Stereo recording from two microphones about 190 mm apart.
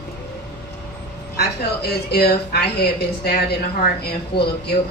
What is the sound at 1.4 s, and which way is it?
A woman's voice, 55° left (ahead or behind).